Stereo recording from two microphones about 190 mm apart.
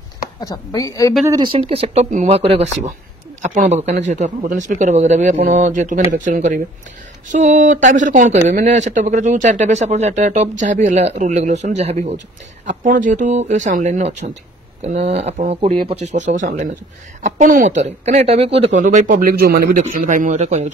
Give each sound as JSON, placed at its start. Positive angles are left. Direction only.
{"t": 0.4, "sound": "speech", "side_deg": 20}
{"t": 1.2, "sound": "speech", "side_deg": -25}
{"t": 19.8, "sound": "speech", "side_deg": -40}